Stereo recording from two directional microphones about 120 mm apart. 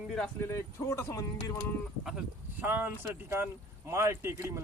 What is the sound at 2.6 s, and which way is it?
Speech, 20° right (ahead or behind).